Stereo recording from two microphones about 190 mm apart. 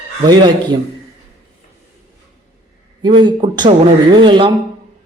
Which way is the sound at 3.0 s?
25° right (ahead or behind).